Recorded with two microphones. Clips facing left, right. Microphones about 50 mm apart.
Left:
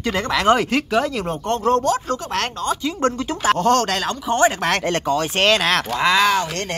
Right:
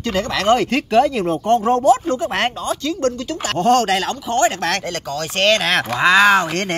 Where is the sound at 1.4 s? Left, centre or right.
Centre.